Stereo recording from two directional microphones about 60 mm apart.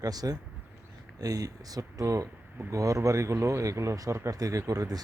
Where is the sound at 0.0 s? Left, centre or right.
Right.